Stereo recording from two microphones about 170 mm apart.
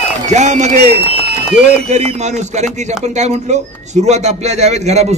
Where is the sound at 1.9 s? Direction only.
40° right (ahead or behind).